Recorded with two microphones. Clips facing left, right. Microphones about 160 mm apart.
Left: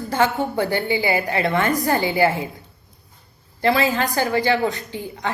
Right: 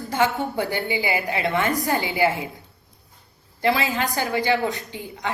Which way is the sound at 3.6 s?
15° right (ahead or behind).